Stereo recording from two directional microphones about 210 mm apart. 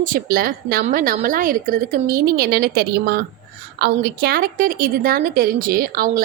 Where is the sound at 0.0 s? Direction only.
45° right (ahead or behind).